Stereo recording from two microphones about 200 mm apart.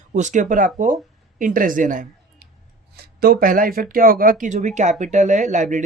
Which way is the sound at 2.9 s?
50° right (ahead or behind).